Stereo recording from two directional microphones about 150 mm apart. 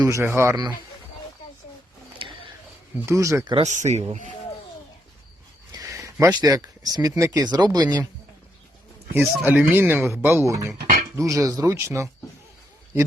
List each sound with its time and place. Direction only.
0.0 s speech: 20° right (ahead or behind)
2.1 s a sound: 35° right (ahead or behind)
3.1 s speech: 20° right (ahead or behind)
3.5 s speech: 50° right (ahead or behind)
5.7 s a sound: 20° right (ahead or behind)
7.1 s speech: 25° right (ahead or behind)
9.1 s speech: 10° right (ahead or behind)